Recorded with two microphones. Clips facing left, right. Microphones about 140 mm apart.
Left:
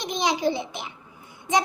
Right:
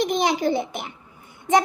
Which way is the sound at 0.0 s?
55° right (ahead or behind).